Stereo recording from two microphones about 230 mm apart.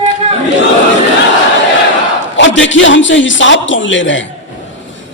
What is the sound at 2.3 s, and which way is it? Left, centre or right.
A man's voice, left.